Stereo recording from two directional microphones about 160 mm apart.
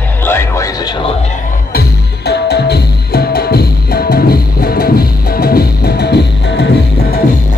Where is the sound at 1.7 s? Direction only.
85° left.